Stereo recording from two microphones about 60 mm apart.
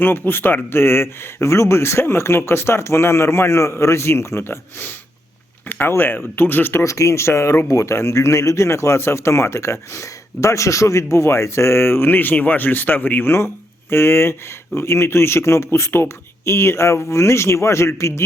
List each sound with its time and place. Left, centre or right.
0.0 s speech: left
6.8 s speech: left
7.7 s speech: left
13.9 s speech: left